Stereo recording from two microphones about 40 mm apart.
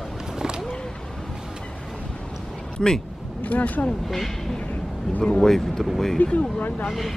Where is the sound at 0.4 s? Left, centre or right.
Centre.